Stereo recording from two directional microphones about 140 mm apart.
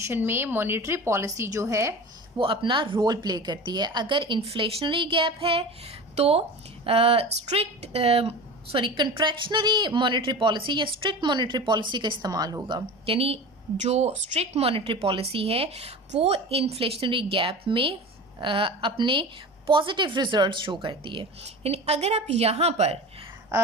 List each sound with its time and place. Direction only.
0.0 s a woman's voice: 15° right (ahead or behind)
2.4 s a woman's voice: 35° right (ahead or behind)